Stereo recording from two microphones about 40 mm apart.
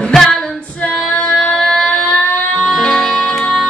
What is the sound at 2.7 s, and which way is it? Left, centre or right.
Music, centre.